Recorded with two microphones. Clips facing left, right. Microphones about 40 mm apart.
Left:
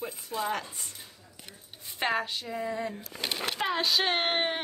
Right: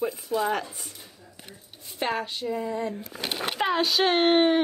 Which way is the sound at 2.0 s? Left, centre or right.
Centre.